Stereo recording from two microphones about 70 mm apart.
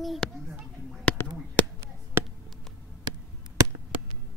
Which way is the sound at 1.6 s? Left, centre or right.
Left.